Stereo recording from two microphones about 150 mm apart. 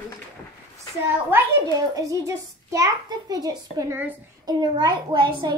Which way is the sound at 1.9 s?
25° right (ahead or behind).